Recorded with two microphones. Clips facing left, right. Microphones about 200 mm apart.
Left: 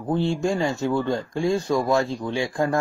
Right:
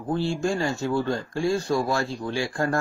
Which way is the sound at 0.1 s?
20° left (ahead or behind).